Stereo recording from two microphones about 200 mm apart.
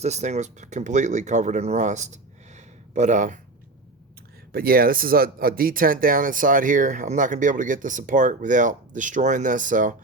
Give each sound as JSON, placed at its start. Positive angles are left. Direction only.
{"t": 0.0, "sound": "speech", "side_deg": -35}
{"t": 2.6, "sound": "a sound", "side_deg": -35}
{"t": 4.5, "sound": "speech", "side_deg": -50}